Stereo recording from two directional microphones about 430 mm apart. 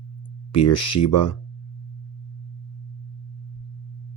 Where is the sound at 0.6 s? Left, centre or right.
Left.